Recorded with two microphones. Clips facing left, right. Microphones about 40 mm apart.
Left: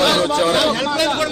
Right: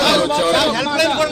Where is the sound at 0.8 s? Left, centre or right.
Right.